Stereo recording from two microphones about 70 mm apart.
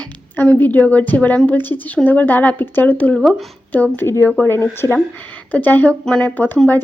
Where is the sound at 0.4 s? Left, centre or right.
Left.